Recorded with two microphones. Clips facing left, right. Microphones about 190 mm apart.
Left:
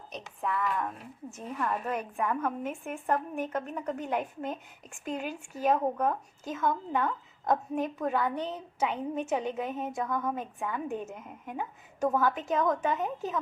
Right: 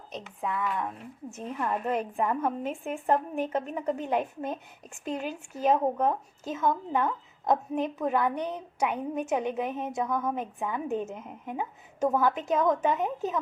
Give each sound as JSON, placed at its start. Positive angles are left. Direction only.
{"t": 0.1, "sound": "a woman's voice", "side_deg": -20}
{"t": 1.4, "sound": "a woman's voice", "side_deg": -20}